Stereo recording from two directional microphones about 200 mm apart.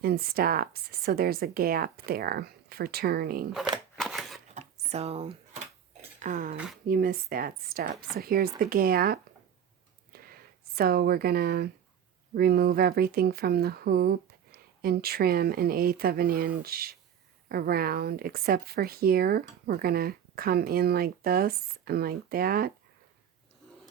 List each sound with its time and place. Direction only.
0.0 s speech: 50° right (ahead or behind)
3.9 s scissors: centre (ahead or behind)
4.5 s a sound: 35° right (ahead or behind)
6.1 s speech: 40° right (ahead or behind)
10.1 s a sound: 50° right (ahead or behind)
10.8 s speech: 50° right (ahead or behind)